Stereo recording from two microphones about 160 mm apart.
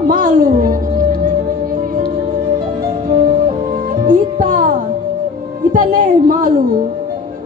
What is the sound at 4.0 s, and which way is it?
Music, 60° right (ahead or behind).